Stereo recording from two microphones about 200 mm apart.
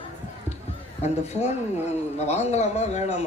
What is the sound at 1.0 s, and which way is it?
Speech, 35° left (ahead or behind).